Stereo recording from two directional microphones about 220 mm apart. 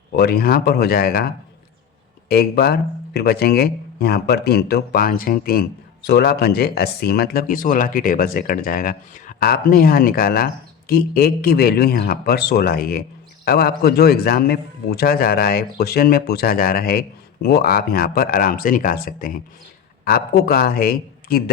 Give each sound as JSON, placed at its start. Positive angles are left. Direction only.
{"t": 0.2, "sound": "speech", "side_deg": 45}
{"t": 2.3, "sound": "speech", "side_deg": 45}